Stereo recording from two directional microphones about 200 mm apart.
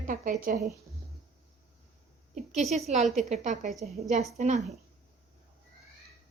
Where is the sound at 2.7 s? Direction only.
35° right (ahead or behind).